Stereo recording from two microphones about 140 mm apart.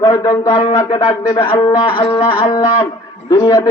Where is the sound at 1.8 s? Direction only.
35° left (ahead or behind).